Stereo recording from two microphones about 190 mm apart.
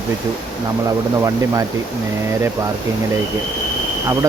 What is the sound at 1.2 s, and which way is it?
Speech, 15° right (ahead or behind).